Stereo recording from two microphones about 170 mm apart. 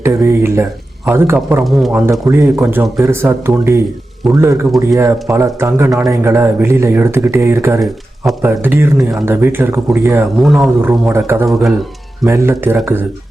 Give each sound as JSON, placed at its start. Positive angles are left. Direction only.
{"t": 0.0, "sound": "speech", "side_deg": -15}
{"t": 7.8, "sound": "speech", "side_deg": 0}
{"t": 8.4, "sound": "speech", "side_deg": -15}
{"t": 10.4, "sound": "speech", "side_deg": 0}
{"t": 10.8, "sound": "speech", "side_deg": -15}